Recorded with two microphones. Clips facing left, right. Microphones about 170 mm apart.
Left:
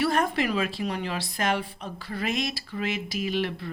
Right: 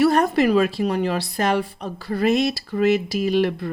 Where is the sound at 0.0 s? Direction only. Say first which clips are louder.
Right 8 dB; 40° right (ahead or behind).